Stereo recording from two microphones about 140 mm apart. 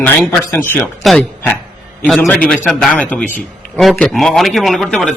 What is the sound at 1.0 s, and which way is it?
A man's voice, centre (ahead or behind).